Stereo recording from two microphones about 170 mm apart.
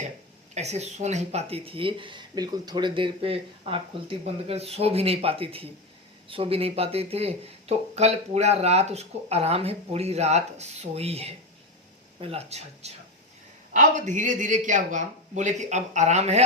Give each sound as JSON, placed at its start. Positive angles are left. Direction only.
{"t": 0.5, "sound": "speech", "side_deg": -40}